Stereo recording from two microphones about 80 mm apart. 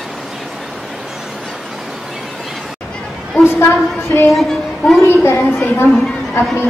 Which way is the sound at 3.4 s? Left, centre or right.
Left.